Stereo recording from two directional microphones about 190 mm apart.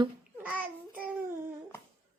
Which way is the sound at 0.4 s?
10° right (ahead or behind).